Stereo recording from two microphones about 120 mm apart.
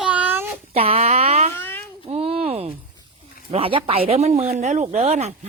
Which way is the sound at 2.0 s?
55° right (ahead or behind).